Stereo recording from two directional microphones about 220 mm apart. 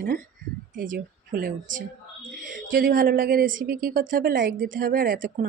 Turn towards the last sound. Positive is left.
turn(degrees=-40)  # may be behind; listen again after turning